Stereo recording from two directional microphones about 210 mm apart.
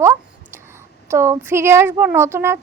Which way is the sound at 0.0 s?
10° right (ahead or behind).